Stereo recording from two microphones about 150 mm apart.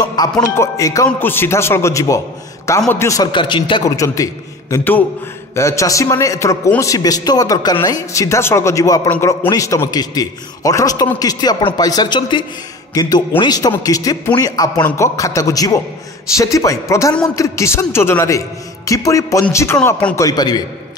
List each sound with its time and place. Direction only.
0.0 s a man's voice: 25° left (ahead or behind)
20.2 s a man's voice: 25° left (ahead or behind)